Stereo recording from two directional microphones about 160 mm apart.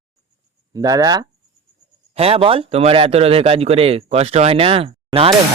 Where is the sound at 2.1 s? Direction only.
40° right (ahead or behind).